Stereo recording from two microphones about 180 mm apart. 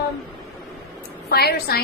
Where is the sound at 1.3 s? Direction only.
60° left (ahead or behind).